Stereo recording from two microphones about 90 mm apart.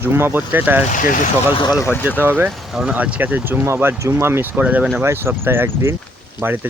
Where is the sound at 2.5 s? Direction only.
5° right (ahead or behind).